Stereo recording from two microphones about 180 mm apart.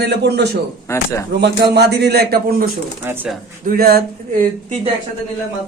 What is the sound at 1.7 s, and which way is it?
A man's voice, 65° right (ahead or behind).